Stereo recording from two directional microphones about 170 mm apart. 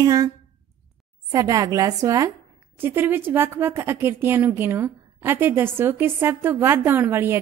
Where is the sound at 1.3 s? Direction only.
20° right (ahead or behind).